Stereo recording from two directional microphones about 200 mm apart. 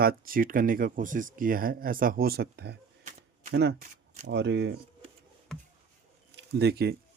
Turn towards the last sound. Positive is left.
turn(degrees=-55)  # may be behind; listen again after turning